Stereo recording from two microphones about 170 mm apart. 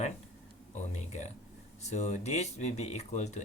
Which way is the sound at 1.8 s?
40° left (ahead or behind).